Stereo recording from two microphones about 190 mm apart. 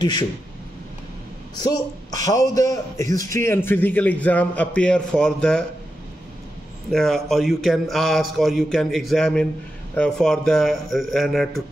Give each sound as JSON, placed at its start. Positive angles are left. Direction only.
{"t": 0.0, "sound": "speech", "side_deg": 20}
{"t": 1.6, "sound": "a man's voice", "side_deg": 20}
{"t": 6.9, "sound": "a man's voice", "side_deg": 0}